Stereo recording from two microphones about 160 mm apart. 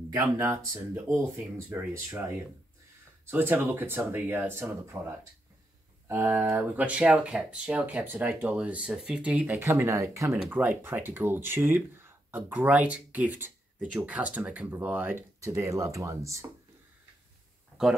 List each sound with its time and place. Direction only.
0.1 s speech: 15° right (ahead or behind)